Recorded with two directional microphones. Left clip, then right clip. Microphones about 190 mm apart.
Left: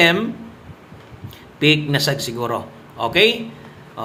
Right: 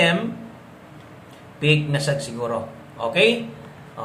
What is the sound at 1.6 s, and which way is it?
A man's voice, 40° left (ahead or behind).